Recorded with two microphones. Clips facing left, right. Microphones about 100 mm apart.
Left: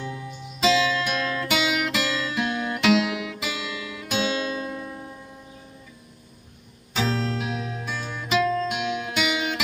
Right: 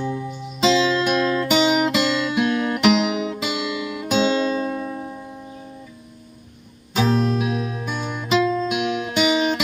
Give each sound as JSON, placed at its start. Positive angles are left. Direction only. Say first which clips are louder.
{"t": 0.1, "sound": "music", "louder": "right 8 dB", "side_deg": 0}
{"t": 0.6, "sound": "music", "louder": "right 4 dB", "side_deg": -25}
{"t": 6.9, "sound": "music", "louder": "right 6 dB", "side_deg": -15}